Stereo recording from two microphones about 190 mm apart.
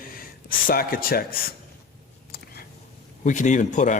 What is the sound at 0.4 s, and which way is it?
Speech, 50° left (ahead or behind).